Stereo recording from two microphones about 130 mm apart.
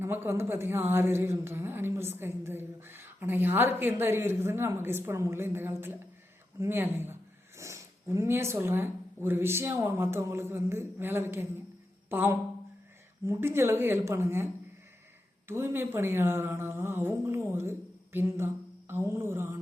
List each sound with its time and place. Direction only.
0.0 s a woman's voice: 20° right (ahead or behind)